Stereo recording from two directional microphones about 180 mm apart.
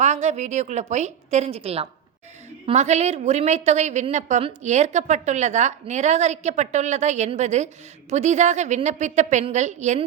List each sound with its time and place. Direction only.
0.0 s a woman's voice: 40° right (ahead or behind)